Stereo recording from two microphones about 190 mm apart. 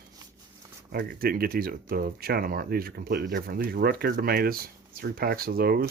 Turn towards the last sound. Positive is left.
turn(degrees=-55)  # may be behind; listen again after turning